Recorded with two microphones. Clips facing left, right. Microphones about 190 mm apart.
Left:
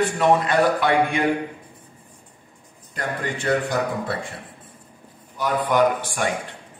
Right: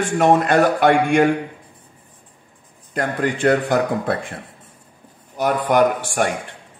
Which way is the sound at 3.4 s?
55° right (ahead or behind).